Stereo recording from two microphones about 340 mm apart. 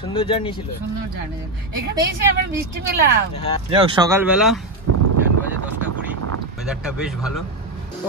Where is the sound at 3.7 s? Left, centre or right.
Centre.